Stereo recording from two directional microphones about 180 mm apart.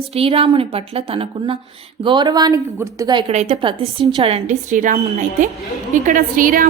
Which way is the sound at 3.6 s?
30° right (ahead or behind).